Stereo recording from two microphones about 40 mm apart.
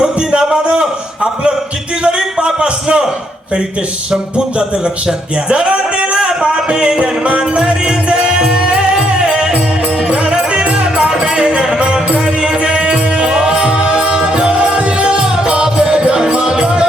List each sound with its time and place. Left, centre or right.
0.0 s a sound: centre
5.5 s speech: right
6.1 s music: centre
10.5 s music: right